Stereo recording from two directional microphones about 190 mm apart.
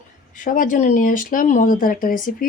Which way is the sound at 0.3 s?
45° left (ahead or behind).